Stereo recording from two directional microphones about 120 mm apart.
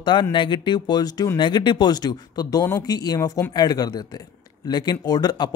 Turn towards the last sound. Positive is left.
turn(degrees=35)  # may be behind; listen again after turning